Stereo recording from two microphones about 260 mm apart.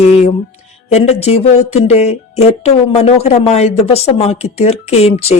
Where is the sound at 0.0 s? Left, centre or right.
Left.